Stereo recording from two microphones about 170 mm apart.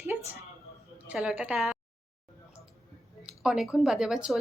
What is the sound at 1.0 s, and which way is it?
Speech, 5° right (ahead or behind).